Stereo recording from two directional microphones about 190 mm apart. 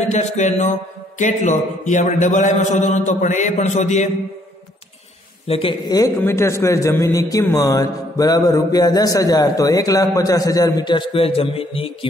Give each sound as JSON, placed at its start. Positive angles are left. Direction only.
{"t": 0.0, "sound": "a man's voice", "side_deg": 35}
{"t": 5.5, "sound": "a man's voice", "side_deg": 25}